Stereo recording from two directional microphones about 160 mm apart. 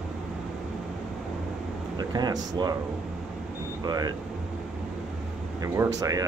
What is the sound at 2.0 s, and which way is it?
Speech, 25° right (ahead or behind).